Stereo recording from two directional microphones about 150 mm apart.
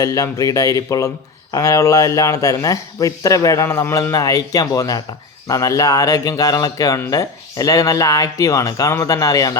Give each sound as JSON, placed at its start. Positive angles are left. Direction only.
{"t": 0.0, "sound": "speech", "side_deg": 25}